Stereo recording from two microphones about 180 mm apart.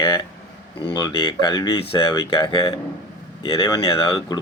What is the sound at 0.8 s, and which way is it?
Speech, 25° left (ahead or behind).